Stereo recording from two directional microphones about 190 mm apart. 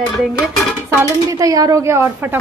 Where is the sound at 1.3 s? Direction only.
20° right (ahead or behind).